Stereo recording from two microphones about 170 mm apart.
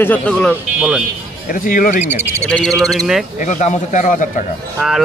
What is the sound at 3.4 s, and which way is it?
A man's voice, 45° left (ahead or behind).